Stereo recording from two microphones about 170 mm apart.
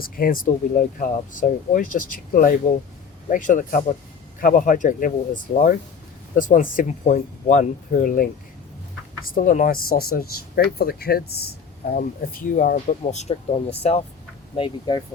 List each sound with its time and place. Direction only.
0.0 s speech: 60° left (ahead or behind)
6.3 s speech: 50° left (ahead or behind)
14.5 s speech: 30° left (ahead or behind)